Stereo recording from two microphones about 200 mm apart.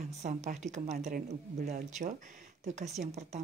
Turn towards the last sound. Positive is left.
turn(degrees=-35)  # may be behind; listen again after turning